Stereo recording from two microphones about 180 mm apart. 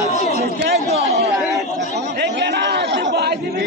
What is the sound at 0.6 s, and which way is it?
Chatter, 65° right (ahead or behind).